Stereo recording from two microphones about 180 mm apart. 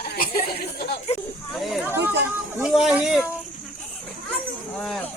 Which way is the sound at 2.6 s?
5° right (ahead or behind).